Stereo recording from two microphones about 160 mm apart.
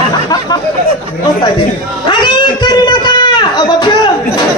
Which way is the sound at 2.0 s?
30° left (ahead or behind).